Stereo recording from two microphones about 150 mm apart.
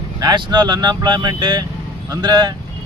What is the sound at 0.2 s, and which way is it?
Speech, 30° right (ahead or behind).